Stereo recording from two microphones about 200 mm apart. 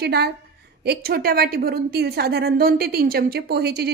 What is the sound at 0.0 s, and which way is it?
A woman's voice, 55° right (ahead or behind).